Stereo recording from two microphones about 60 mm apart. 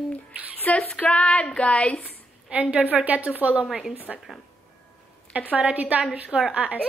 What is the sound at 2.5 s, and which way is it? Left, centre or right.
A woman's voice, right.